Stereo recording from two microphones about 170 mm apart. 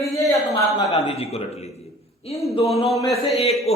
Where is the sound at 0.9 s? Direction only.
35° left (ahead or behind).